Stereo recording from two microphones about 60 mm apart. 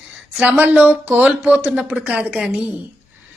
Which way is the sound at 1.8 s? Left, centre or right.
Centre.